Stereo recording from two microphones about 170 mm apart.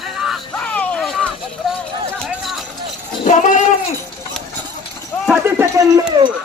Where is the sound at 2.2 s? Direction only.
Centre (ahead or behind).